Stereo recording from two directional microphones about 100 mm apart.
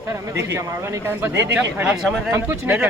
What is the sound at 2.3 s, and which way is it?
Speech, 30° right (ahead or behind).